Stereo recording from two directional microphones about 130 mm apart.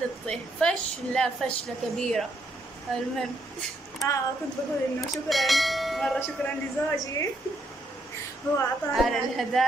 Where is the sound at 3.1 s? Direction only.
5° left (ahead or behind).